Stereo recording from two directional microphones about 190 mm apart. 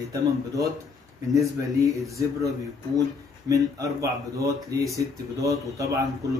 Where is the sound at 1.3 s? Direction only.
15° right (ahead or behind).